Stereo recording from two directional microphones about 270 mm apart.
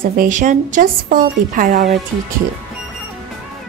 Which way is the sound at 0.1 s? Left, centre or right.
Right.